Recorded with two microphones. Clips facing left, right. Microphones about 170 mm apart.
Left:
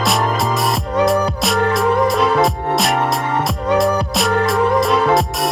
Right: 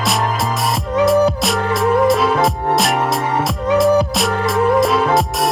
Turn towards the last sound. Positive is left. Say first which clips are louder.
# even
turn(degrees=0)  # may be behind; listen again after turning